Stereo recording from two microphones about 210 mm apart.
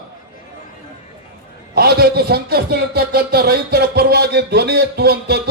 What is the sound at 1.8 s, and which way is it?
Speech, 45° right (ahead or behind).